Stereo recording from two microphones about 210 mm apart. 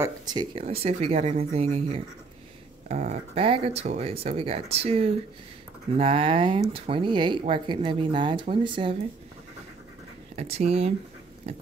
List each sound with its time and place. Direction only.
0.0 s speech: 20° right (ahead or behind)
10.3 s speech: 30° right (ahead or behind)